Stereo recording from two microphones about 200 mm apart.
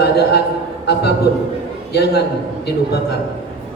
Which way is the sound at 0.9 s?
55° left (ahead or behind).